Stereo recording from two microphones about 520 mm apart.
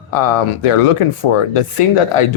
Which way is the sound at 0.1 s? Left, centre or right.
Left.